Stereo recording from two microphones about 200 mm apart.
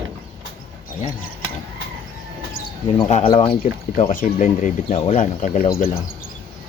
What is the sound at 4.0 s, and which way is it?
Speech, 40° left (ahead or behind).